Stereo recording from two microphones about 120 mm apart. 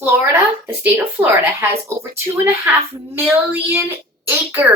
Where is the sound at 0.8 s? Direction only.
15° right (ahead or behind).